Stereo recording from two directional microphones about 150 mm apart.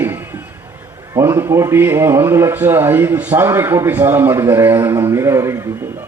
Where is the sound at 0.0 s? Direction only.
15° right (ahead or behind).